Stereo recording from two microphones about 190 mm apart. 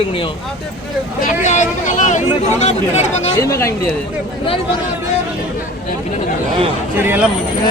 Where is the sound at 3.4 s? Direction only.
15° left (ahead or behind).